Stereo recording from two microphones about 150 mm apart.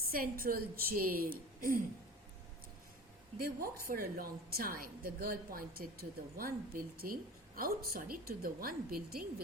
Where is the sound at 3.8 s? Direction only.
75° right (ahead or behind).